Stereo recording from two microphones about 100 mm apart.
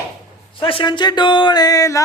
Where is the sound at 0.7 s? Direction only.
55° left (ahead or behind); by 2.0 s 35° left (ahead or behind).